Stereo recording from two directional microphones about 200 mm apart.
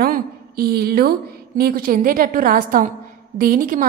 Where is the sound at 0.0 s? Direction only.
50° right (ahead or behind).